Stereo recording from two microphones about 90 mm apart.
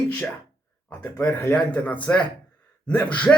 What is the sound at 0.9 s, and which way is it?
Speech, 30° left (ahead or behind).